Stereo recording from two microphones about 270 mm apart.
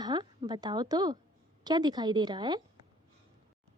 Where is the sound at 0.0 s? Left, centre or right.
Centre.